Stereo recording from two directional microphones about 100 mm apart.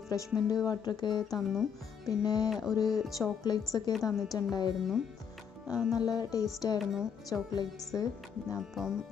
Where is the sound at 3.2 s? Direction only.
40° left (ahead or behind).